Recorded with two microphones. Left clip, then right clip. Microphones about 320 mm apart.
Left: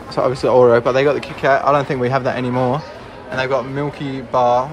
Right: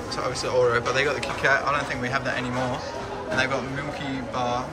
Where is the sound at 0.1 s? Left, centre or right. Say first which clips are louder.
Left 11 dB; centre.